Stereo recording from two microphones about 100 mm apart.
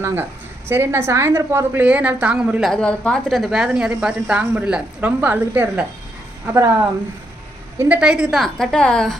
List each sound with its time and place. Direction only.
0.0 s a woman's voice: 25° right (ahead or behind)
1.8 s a woman's voice: 15° right (ahead or behind)
2.6 s a woman's voice: 5° left (ahead or behind); by 6.7 s 25° right (ahead or behind)
7.9 s a woman's voice: 10° right (ahead or behind)